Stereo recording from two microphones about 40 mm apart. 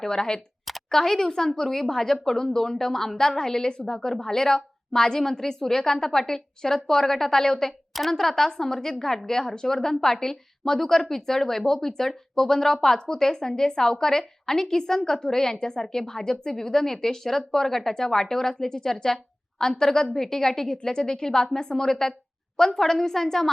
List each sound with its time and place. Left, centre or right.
0.0 s a woman's voice: centre